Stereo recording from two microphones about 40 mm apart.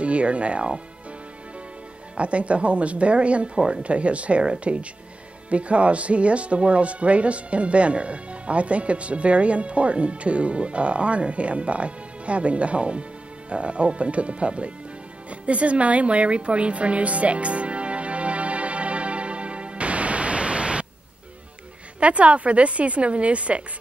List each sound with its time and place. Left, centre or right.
0.0 s speech: right
2.1 s speech: right
15.2 s music: right
22.0 s speech: right